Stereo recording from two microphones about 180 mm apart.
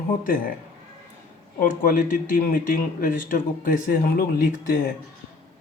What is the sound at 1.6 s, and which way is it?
A man's voice, 50° left (ahead or behind).